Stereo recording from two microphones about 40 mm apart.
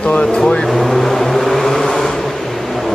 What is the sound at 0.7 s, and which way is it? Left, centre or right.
Vehicle, centre.